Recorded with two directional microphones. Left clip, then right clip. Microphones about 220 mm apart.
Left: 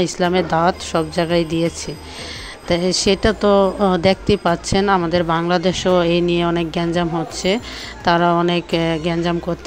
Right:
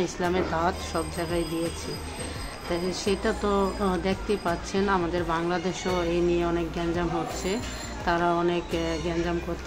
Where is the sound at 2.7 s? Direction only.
35° left (ahead or behind).